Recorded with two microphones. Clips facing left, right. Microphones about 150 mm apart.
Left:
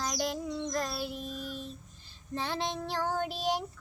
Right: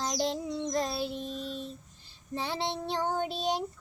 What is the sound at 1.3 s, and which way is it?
Child singing, 25° right (ahead or behind).